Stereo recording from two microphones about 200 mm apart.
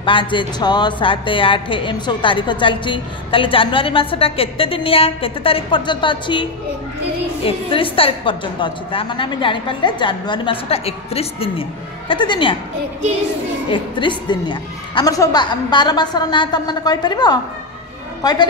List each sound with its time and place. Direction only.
0.0 s speech: 25° left (ahead or behind)
7.4 s speech: 25° left (ahead or behind)
13.7 s speech: 25° left (ahead or behind)